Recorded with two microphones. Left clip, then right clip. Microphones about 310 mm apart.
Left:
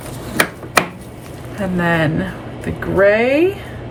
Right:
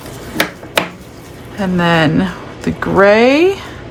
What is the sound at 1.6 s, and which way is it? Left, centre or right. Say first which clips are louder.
Speech: right 4 dB; centre.